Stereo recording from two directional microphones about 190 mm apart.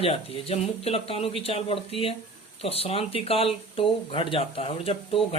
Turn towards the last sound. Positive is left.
turn(degrees=30)  # may be behind; listen again after turning